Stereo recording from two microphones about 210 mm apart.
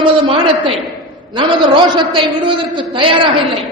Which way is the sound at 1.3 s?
20° right (ahead or behind).